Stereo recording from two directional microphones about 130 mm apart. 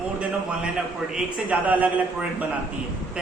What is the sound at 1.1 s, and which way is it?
Speech, 10° right (ahead or behind).